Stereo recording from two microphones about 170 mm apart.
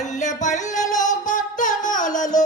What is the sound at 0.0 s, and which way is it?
Music, 45° left (ahead or behind).